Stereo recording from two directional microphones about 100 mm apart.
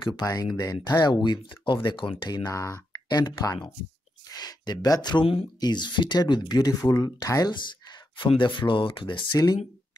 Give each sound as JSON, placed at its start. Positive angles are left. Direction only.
{"t": 0.0, "sound": "speech", "side_deg": 55}
{"t": 0.3, "sound": "speech", "side_deg": 40}
{"t": 2.5, "sound": "speech", "side_deg": 30}
{"t": 5.2, "sound": "speech", "side_deg": 70}
{"t": 5.6, "sound": "speech", "side_deg": 45}
{"t": 8.3, "sound": "speech", "side_deg": 55}